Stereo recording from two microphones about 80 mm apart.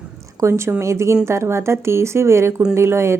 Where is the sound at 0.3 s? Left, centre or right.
Right.